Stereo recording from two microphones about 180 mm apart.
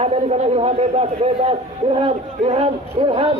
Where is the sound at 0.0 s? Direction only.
35° right (ahead or behind).